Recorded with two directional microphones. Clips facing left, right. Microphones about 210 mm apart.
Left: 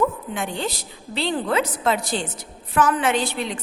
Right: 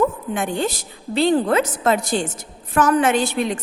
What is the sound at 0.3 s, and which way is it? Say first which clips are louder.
A woman's voice: right 5 dB; 50° right (ahead or behind).